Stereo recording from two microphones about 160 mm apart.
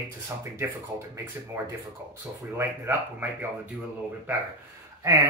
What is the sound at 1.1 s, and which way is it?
Speech, 15° right (ahead or behind).